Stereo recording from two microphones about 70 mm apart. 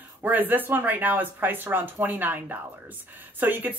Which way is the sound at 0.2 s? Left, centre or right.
Right.